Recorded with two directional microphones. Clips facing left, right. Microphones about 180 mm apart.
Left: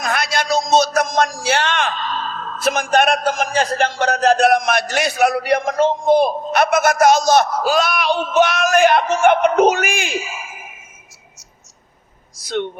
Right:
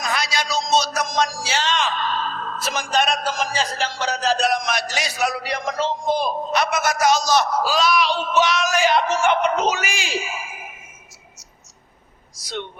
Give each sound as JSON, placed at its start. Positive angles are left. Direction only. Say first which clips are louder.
{"t": 0.0, "sound": "a sound", "louder": "left 4 dB", "side_deg": 55}
{"t": 2.6, "sound": "a man's voice", "louder": "left 7 dB", "side_deg": 55}
{"t": 12.6, "sound": "a man's voice", "louder": "left 9 dB", "side_deg": 55}